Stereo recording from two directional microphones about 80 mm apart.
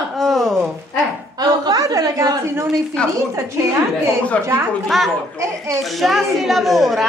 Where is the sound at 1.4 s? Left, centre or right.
Right.